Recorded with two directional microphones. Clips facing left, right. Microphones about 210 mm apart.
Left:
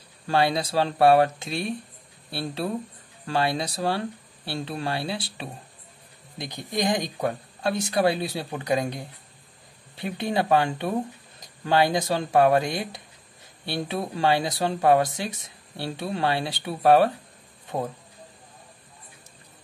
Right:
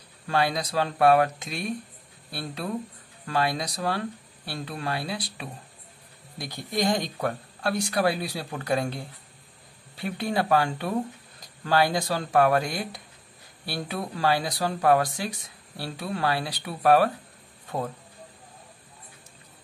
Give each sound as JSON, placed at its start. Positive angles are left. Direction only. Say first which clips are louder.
{"t": 0.3, "sound": "speech", "louder": "left 3 dB", "side_deg": 30}